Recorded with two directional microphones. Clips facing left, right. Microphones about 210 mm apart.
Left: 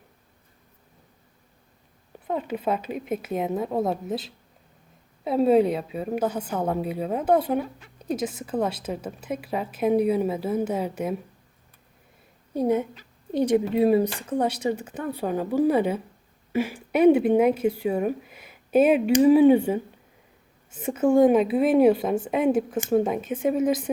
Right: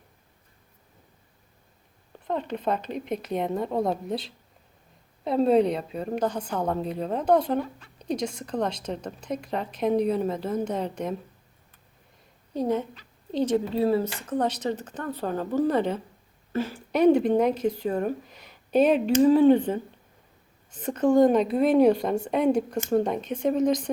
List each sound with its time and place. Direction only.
2.2 s a woman's voice: 5° left (ahead or behind)
12.5 s a woman's voice: 10° left (ahead or behind)